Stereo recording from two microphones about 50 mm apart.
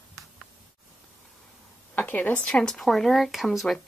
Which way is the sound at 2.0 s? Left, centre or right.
Left.